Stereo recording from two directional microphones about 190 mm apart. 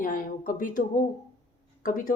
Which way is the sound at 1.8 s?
45° left (ahead or behind).